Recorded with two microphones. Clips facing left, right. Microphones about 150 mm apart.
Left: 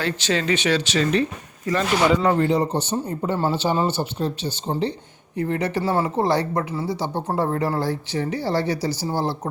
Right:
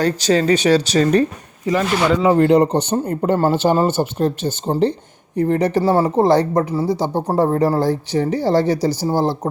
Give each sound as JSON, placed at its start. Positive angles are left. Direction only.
{"t": 0.0, "sound": "speech", "side_deg": -40}
{"t": 2.0, "sound": "speech", "side_deg": 0}
{"t": 2.4, "sound": "speech", "side_deg": -65}
{"t": 2.9, "sound": "speech", "side_deg": -55}